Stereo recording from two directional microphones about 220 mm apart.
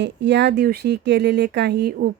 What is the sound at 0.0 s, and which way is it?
Speech, 50° right (ahead or behind).